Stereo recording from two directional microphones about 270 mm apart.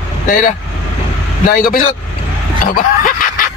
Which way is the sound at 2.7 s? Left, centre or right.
Left.